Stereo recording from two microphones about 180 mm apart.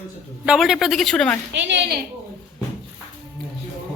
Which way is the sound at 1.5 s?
75° right (ahead or behind).